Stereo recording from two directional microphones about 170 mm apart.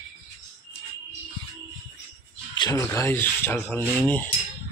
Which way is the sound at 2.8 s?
15° left (ahead or behind).